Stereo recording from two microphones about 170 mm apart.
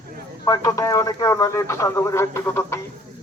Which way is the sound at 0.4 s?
20° left (ahead or behind).